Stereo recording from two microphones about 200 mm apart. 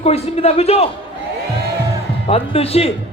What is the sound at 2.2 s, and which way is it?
Speech, 30° left (ahead or behind).